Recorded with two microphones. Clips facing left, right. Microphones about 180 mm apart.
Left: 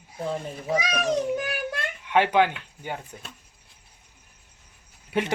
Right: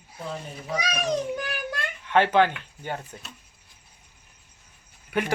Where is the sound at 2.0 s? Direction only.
10° left (ahead or behind).